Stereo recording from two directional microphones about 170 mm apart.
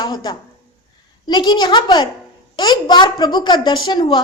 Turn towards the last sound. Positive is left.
turn(degrees=25)  # may be behind; listen again after turning